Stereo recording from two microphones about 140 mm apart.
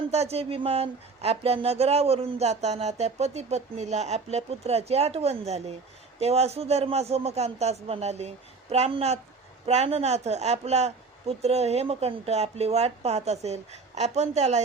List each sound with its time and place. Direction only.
0.1 s speech: 50° right (ahead or behind)